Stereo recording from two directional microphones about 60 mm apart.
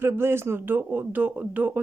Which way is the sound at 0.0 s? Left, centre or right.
Right.